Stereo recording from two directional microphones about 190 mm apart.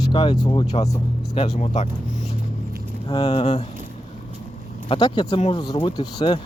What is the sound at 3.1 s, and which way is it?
Speech, 25° left (ahead or behind).